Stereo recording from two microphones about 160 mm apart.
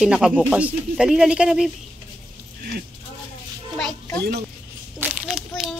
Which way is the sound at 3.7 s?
5° left (ahead or behind).